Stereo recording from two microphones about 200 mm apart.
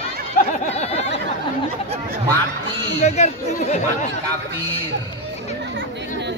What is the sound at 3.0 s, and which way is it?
Speech, 35° left (ahead or behind).